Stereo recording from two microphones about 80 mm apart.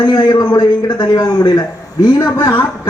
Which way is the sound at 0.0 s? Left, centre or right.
Left.